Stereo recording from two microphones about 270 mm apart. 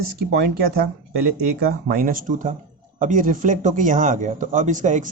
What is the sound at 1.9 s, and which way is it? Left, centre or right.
Speech, right.